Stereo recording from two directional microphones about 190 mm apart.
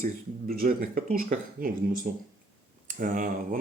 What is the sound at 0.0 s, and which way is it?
Speech, 45° right (ahead or behind).